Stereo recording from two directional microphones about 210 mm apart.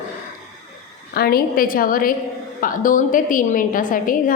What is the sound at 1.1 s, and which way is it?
A woman's voice, 45° left (ahead or behind).